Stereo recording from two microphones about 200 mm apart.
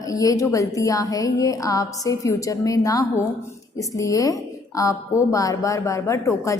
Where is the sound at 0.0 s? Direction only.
15° left (ahead or behind).